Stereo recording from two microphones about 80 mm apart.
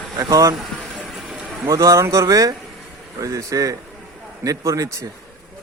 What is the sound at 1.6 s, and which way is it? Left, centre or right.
Speech, right.